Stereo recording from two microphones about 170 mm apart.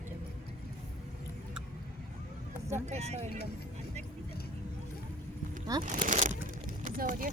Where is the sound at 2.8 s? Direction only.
40° right (ahead or behind).